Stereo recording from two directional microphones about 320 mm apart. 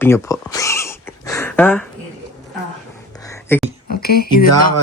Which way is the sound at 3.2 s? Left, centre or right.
Centre.